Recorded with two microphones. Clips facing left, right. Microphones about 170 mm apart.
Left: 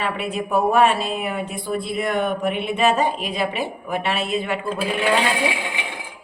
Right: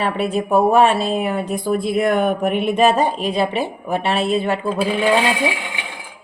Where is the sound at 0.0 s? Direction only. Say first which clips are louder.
Right 5 dB; 35° right (ahead or behind).